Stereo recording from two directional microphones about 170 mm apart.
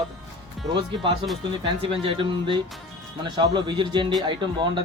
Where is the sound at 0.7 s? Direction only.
25° right (ahead or behind).